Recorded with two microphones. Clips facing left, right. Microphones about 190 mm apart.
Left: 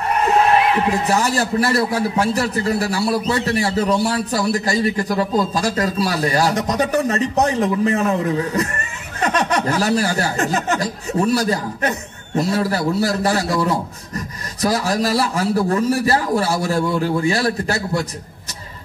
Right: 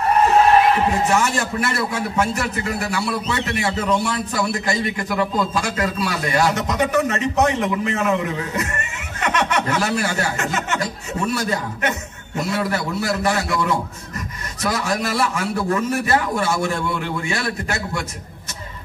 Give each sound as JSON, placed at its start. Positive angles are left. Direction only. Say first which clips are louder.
{"t": 1.0, "sound": "a man's voice", "louder": "left 1 dB", "side_deg": 35}